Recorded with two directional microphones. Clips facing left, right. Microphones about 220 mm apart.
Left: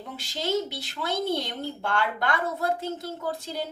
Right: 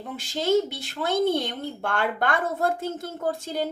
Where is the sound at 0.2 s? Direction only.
50° right (ahead or behind).